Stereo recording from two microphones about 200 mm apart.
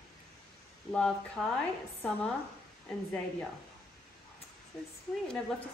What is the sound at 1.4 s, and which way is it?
Speech, 5° right (ahead or behind).